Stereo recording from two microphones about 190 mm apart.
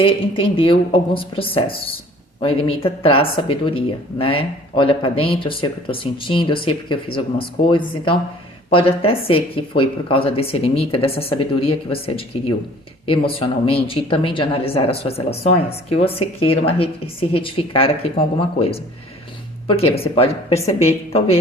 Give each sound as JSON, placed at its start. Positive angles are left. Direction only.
{"t": 0.0, "sound": "speech", "side_deg": 30}